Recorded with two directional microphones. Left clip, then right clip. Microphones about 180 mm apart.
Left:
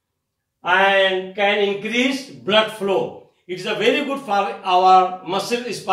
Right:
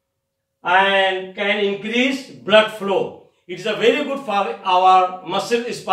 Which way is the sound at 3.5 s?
15° right (ahead or behind).